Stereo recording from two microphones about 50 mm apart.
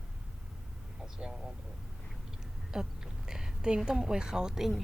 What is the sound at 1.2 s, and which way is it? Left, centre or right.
Speech, centre.